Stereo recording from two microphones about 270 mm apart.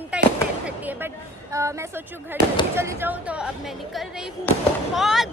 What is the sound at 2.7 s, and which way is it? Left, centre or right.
Speech, centre.